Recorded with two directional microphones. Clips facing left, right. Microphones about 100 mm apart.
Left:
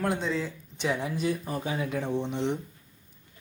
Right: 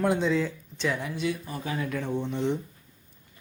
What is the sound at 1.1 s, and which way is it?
Speech, 40° left (ahead or behind).